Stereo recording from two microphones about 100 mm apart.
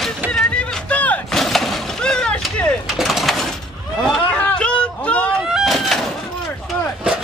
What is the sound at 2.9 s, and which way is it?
Mechanisms, centre (ahead or behind).